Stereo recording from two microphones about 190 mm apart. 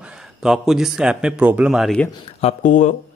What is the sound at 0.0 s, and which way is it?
A man's voice, 5° right (ahead or behind).